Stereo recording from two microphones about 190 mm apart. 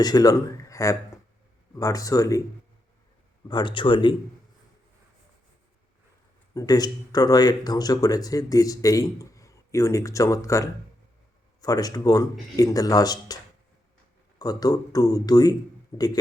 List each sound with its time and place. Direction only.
0.0 s speech: 20° left (ahead or behind)
3.5 s speech: 25° left (ahead or behind)
6.5 s speech: 20° left (ahead or behind)